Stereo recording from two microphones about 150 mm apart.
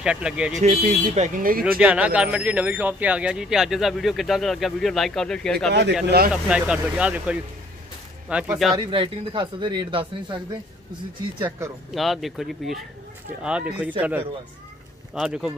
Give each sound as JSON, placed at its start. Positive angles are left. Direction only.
{"t": 0.0, "sound": "speech", "side_deg": -5}
{"t": 0.6, "sound": "speech", "side_deg": -50}
{"t": 1.8, "sound": "speech", "side_deg": -10}
{"t": 6.0, "sound": "speech", "side_deg": -90}
{"t": 6.3, "sound": "speech", "side_deg": -5}
{"t": 8.7, "sound": "speech", "side_deg": -35}
{"t": 11.9, "sound": "speech", "side_deg": 0}